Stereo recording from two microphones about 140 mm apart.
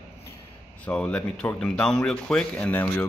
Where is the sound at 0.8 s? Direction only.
10° left (ahead or behind).